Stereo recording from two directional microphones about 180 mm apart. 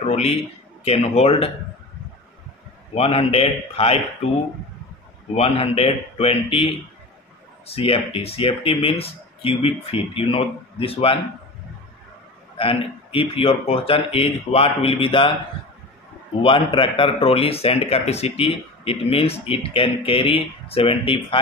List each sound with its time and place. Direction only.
0.0 s a man's voice: 40° left (ahead or behind)
2.9 s a man's voice: 30° left (ahead or behind)
5.3 s a man's voice: 35° left (ahead or behind)
7.7 s a man's voice: 30° left (ahead or behind)
12.5 s a man's voice: 30° left (ahead or behind)
16.4 s a man's voice: 30° left (ahead or behind)